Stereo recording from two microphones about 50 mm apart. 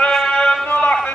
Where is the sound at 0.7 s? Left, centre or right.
Left.